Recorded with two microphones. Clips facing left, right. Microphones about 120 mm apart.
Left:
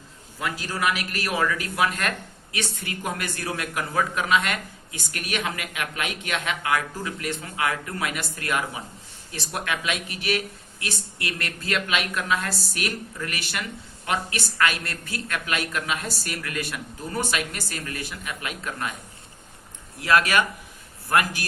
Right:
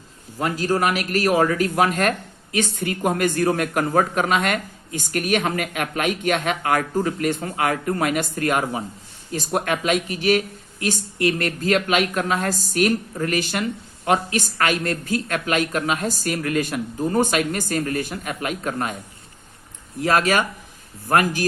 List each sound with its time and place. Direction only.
0.3 s a woman's voice: 40° right (ahead or behind)
20.0 s a woman's voice: 40° right (ahead or behind)